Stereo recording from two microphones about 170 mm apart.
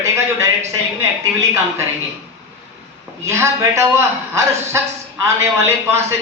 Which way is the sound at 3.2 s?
15° right (ahead or behind).